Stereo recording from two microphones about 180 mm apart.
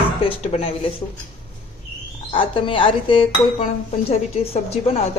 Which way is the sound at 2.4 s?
30° left (ahead or behind).